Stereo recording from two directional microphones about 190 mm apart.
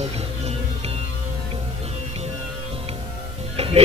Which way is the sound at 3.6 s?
35° right (ahead or behind).